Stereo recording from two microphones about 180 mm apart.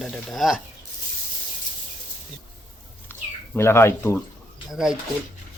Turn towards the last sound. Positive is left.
turn(degrees=0)  # may be behind; listen again after turning